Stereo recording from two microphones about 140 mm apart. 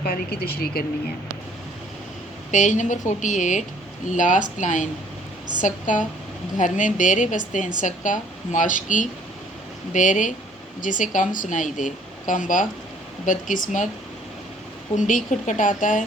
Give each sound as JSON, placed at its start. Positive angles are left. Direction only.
{"t": 0.0, "sound": "speech", "side_deg": 90}
{"t": 2.5, "sound": "a woman's voice", "side_deg": 65}
{"t": 14.9, "sound": "speech", "side_deg": 65}